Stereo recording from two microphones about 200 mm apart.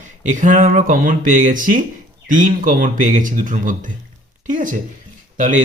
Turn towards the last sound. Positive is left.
turn(degrees=-40)  # may be behind; listen again after turning